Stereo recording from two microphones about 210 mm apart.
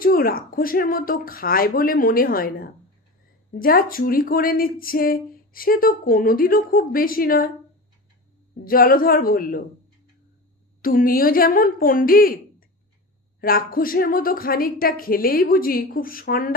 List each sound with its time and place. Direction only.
0.0 s speech: 45° left (ahead or behind)
8.6 s speech: 45° left (ahead or behind)
10.8 s speech: 45° left (ahead or behind)